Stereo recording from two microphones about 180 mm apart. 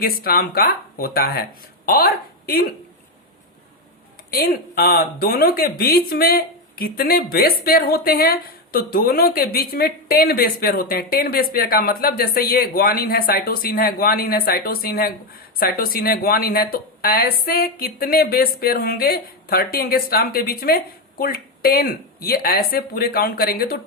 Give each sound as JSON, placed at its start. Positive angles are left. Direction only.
{"t": 0.0, "sound": "a woman's voice", "side_deg": 55}
{"t": 4.3, "sound": "speech", "side_deg": 55}